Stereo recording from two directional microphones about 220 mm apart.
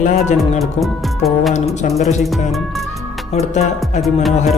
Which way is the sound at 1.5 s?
30° left (ahead or behind).